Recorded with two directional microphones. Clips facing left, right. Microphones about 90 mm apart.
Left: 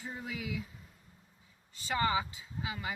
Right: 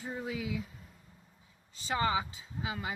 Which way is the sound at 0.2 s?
25° right (ahead or behind).